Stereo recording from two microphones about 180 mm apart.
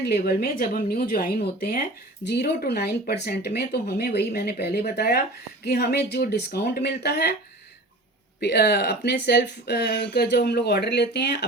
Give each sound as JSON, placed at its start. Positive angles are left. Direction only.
{"t": 0.0, "sound": "speech", "side_deg": 60}
{"t": 8.4, "sound": "speech", "side_deg": 70}